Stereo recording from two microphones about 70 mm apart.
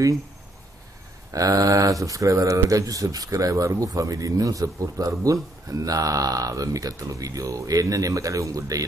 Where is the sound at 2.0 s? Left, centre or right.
Right.